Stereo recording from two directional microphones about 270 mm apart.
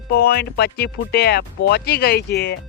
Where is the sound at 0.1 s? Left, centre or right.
Left.